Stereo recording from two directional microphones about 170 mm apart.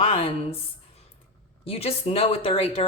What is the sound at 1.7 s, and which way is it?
Speech, 35° left (ahead or behind).